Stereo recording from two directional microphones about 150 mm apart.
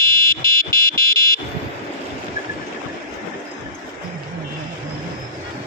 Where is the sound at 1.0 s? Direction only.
20° left (ahead or behind).